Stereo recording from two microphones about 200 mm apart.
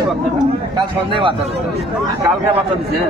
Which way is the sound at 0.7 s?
25° right (ahead or behind).